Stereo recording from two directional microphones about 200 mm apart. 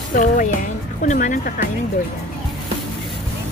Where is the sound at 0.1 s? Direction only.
40° left (ahead or behind).